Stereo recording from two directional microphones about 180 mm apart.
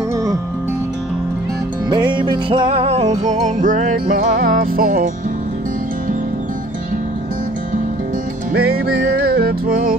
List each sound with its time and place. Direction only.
1.9 s music: 25° right (ahead or behind); by 5.1 s 50° right (ahead or behind)
8.5 s music: 60° right (ahead or behind)